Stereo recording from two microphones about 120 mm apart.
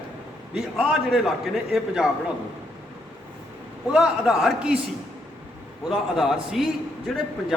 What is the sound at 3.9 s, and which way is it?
Speech, 5° right (ahead or behind).